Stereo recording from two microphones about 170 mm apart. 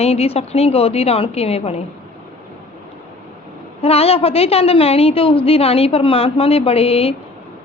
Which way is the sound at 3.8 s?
35° left (ahead or behind).